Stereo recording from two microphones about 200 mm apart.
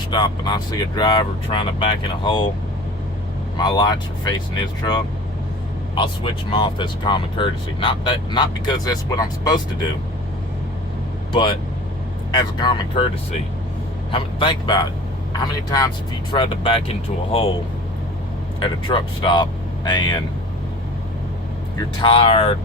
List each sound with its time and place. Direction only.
0.1 s speech: 20° left (ahead or behind)
3.6 s speech: 20° left (ahead or behind)
11.3 s speech: 25° left (ahead or behind)
14.1 s speech: 25° left (ahead or behind)
16.3 s speech: 25° left (ahead or behind)
18.6 s speech: 25° left (ahead or behind)
21.8 s speech: 25° left (ahead or behind)